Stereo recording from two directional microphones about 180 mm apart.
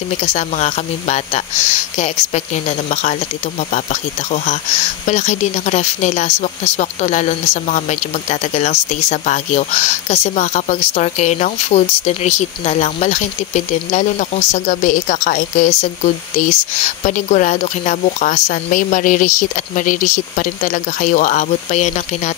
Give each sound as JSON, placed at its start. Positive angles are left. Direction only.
{"t": 0.2, "sound": "speech", "side_deg": 40}